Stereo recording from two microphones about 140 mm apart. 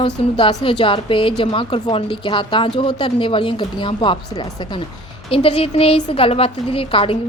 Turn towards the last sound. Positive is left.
turn(degrees=40)  # may be behind; listen again after turning